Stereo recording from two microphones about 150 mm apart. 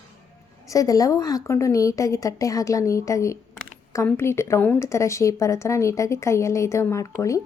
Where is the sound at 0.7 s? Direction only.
25° left (ahead or behind).